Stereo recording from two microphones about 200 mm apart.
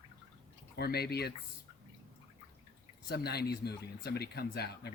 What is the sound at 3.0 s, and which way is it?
Speech, 55° left (ahead or behind).